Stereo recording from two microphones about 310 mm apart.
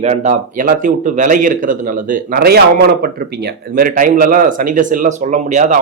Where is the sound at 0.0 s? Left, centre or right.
Right.